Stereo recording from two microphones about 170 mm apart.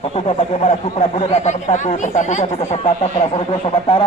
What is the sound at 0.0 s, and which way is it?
Speech, 35° left (ahead or behind).